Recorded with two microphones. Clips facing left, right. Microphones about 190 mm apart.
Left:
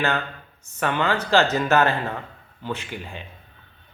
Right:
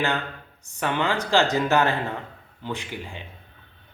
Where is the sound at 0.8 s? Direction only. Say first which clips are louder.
Left 1 dB; 15° right (ahead or behind).